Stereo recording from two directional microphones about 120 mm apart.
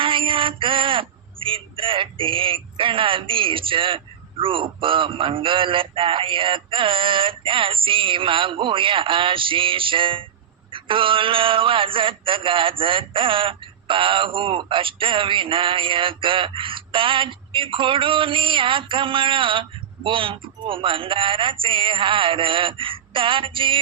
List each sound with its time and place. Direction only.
0.0 s male singing: 45° right (ahead or behind)